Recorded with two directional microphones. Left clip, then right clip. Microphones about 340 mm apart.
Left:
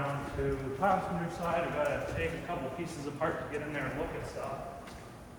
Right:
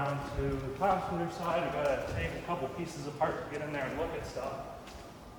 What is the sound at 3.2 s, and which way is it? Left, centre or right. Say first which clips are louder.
Speech: right 2 dB; right.